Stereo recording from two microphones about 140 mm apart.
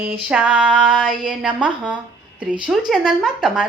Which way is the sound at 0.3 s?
10° right (ahead or behind).